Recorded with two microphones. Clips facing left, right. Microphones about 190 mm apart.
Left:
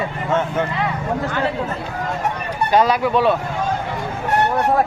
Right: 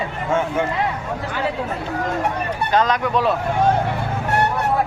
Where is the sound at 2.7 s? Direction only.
10° left (ahead or behind).